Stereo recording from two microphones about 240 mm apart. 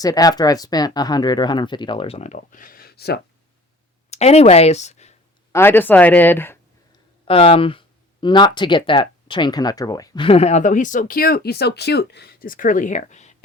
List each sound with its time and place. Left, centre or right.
0.0 s speech: centre; by 3.2 s left
4.1 s speech: left
5.5 s speech: centre
7.3 s speech: left